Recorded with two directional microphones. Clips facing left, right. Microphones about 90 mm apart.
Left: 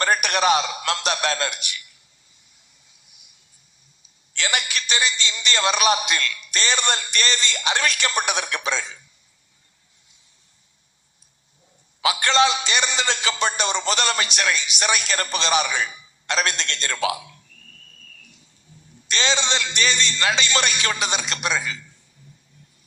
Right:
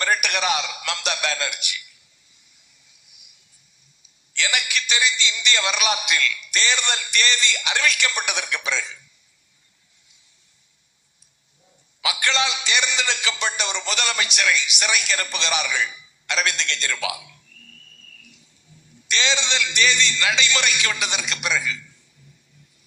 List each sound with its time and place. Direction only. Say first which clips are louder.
0.0 s a man's voice: left 3 dB; 35° left (ahead or behind)
4.0 s a man's voice: right 1 dB; 35° left (ahead or behind)
12.0 s a man's voice: left 5 dB; 35° left (ahead or behind)
18.7 s a sound: left 2 dB; 35° left (ahead or behind)
19.0 s a man's voice: left 1 dB; 35° left (ahead or behind)